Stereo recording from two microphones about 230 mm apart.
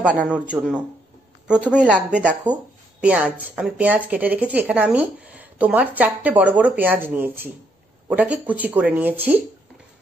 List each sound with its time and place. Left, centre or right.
0.0 s a man's voice: centre
2.0 s speech: centre